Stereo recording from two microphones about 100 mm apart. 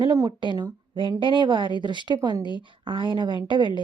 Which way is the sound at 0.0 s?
40° right (ahead or behind).